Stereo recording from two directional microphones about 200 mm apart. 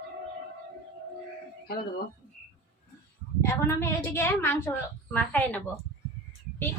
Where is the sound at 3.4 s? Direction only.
15° left (ahead or behind).